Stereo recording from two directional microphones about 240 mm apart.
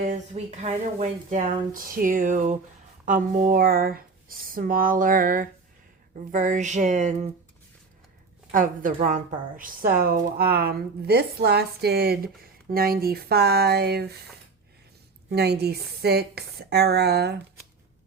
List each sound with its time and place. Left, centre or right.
0.0 s a woman's voice: right
8.5 s a woman's voice: right
15.3 s a woman's voice: right